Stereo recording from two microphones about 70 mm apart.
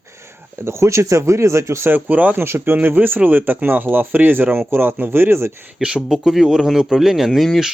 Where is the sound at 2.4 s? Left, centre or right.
Right.